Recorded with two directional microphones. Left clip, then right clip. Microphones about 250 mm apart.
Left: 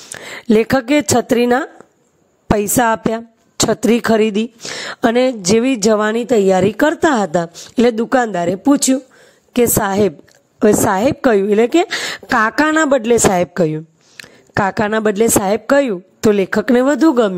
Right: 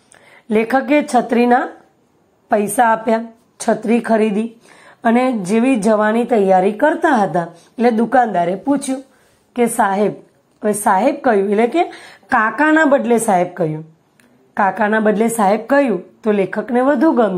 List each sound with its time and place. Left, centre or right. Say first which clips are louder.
0.1 s a woman's voice: left 4 dB; left